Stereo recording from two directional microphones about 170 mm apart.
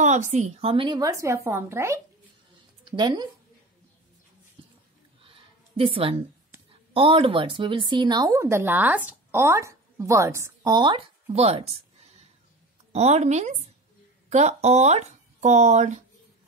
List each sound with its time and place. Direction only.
0.0 s a woman's voice: 45° right (ahead or behind); by 3.3 s 25° right (ahead or behind)
5.2 s a sound: 30° right (ahead or behind)
6.9 s speech: 30° right (ahead or behind)